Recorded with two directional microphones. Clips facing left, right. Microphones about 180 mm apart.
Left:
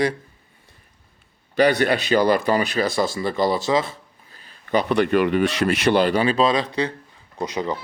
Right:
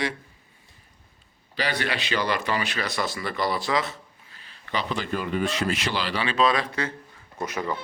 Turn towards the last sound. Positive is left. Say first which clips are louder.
# left 4 dB
turn(degrees=20)  # may be behind; listen again after turning